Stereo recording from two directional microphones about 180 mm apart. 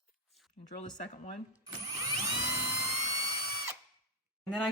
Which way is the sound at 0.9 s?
40° left (ahead or behind).